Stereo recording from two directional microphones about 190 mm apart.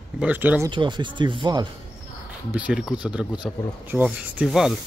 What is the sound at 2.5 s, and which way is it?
Speech, 5° right (ahead or behind).